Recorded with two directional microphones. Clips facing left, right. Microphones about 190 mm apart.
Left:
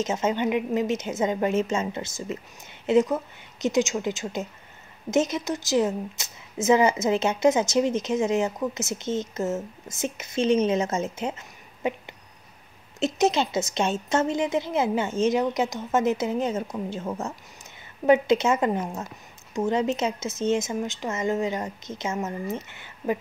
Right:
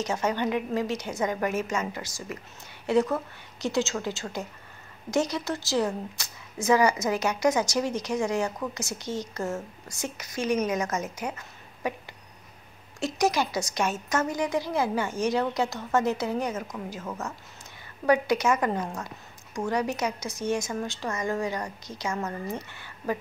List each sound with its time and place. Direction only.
0.0 s a woman's voice: 20° left (ahead or behind)